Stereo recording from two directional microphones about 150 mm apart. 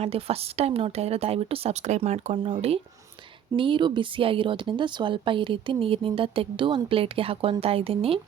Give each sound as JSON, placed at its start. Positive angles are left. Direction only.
{"t": 0.0, "sound": "speech", "side_deg": -40}